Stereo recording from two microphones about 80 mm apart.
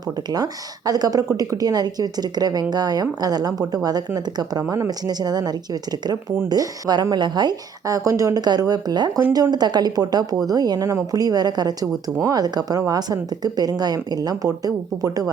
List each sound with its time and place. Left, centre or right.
0.3 s a woman's voice: right